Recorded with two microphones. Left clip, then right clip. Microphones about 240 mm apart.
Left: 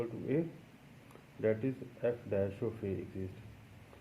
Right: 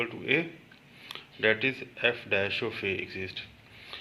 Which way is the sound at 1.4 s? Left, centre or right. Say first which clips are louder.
Right 8 dB; centre.